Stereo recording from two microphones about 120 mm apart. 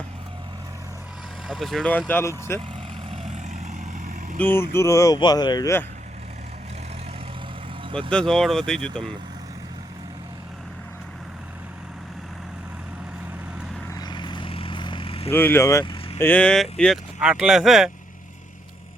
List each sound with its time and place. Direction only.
1.5 s speech: centre (ahead or behind)
1.9 s speech: 15° left (ahead or behind)
3.1 s vehicle: 70° right (ahead or behind)
4.4 s speech: 20° left (ahead or behind); by 5.7 s 35° left (ahead or behind)
8.1 s speech: 5° left (ahead or behind)
13.9 s vehicle: 35° left (ahead or behind)
15.3 s speech: 20° left (ahead or behind)
17.2 s speech: 5° right (ahead or behind)